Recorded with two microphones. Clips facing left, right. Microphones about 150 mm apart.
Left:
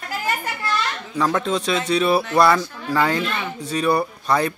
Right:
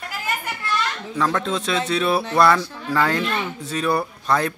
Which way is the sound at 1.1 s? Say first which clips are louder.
Left 2 dB; 5° left (ahead or behind).